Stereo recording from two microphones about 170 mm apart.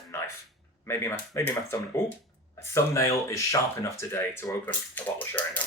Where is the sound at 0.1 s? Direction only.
15° left (ahead or behind).